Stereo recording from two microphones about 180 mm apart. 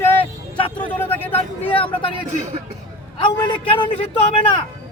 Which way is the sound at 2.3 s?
40° right (ahead or behind).